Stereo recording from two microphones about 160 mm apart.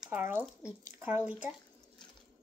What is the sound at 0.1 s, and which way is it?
A child's voice, 15° right (ahead or behind).